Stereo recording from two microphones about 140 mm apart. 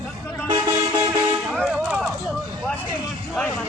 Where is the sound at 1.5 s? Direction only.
5° right (ahead or behind).